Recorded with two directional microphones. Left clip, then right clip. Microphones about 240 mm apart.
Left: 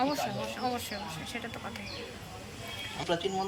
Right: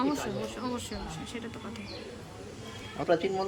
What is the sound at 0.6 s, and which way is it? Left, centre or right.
Speech, centre.